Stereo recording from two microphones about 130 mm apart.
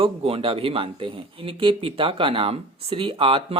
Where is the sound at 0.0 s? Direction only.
45° right (ahead or behind).